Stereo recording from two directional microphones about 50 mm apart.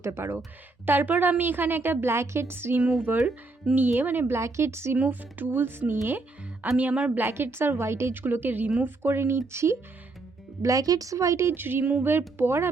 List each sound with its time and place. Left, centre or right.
0.0 s a woman's voice: right
3.1 s a woman's voice: right
4.4 s a woman's voice: right
4.9 s speech: right
6.7 s speech: right
7.2 s a woman's voice: right
8.1 s speech: right
8.8 s a woman's voice: right
10.6 s a woman's voice: right
11.5 s a woman's voice: right